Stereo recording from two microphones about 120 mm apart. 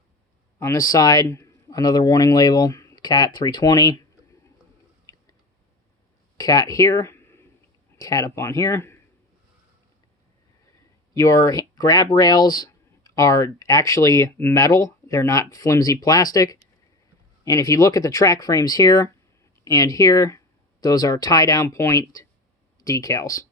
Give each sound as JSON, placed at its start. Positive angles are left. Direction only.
{"t": 0.6, "sound": "a man's voice", "side_deg": 30}
{"t": 5.1, "sound": "chewing", "side_deg": 30}
{"t": 6.3, "sound": "speech", "side_deg": 30}
{"t": 11.1, "sound": "speech", "side_deg": 25}